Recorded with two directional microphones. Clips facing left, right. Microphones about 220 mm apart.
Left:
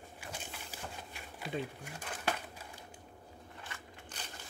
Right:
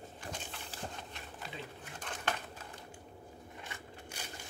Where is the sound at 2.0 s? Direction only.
10° left (ahead or behind).